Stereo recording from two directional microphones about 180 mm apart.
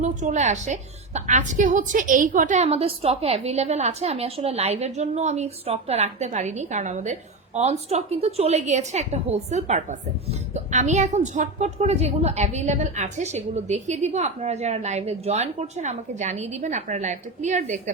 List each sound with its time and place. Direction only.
0.0 s a woman's voice: 40° right (ahead or behind)